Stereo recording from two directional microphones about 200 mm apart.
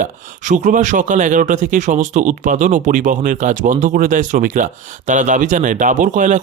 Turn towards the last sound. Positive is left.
turn(degrees=-40)  # may be behind; listen again after turning